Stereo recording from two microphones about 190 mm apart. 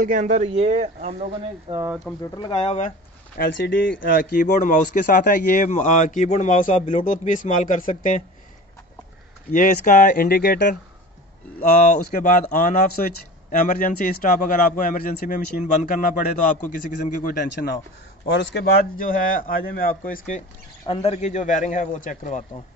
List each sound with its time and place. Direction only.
0.0 s speech: 45° right (ahead or behind)
2.3 s a man's voice: 25° left (ahead or behind)
3.3 s speech: 60° left (ahead or behind)
4.0 s speech: 50° left (ahead or behind)
9.5 s speech: 45° left (ahead or behind)
18.2 s speech: 65° left (ahead or behind); by 20.4 s 40° left (ahead or behind)
20.8 s a man's voice: 30° left (ahead or behind)